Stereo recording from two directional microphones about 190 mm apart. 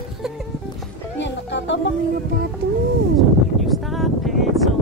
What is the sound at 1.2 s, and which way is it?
Music, 70° left (ahead or behind).